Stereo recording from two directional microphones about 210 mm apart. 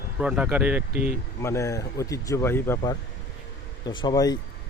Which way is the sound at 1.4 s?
15° left (ahead or behind).